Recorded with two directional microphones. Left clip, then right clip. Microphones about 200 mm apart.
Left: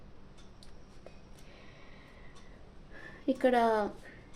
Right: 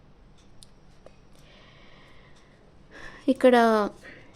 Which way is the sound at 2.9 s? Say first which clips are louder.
Right 7 dB; 45° right (ahead or behind).